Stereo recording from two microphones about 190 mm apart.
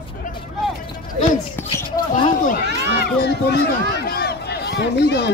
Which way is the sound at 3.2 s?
60° left (ahead or behind).